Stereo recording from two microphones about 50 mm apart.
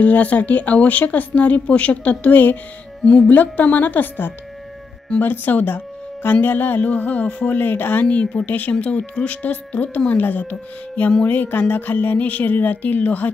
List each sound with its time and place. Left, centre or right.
0.0 s a woman's voice: left